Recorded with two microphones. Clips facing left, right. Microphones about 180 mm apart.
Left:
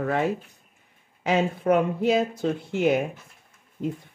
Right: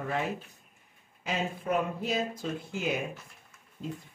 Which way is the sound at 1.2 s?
80° left.